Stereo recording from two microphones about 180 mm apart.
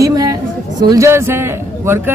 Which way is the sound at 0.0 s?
20° right (ahead or behind).